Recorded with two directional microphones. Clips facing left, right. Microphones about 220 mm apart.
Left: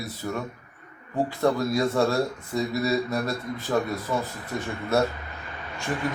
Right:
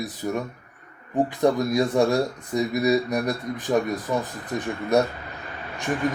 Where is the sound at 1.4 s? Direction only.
15° right (ahead or behind).